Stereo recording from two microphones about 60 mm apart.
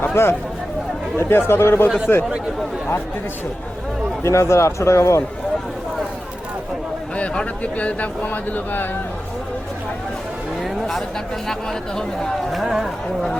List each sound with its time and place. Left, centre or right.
0.0 s speech: left
4.2 s a man's voice: left
7.2 s speech: left
10.6 s a sound: centre
11.4 s speech: centre